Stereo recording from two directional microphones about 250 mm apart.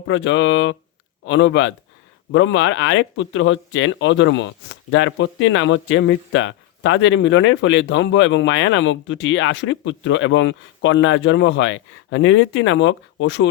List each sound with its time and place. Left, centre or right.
0.1 s speech: left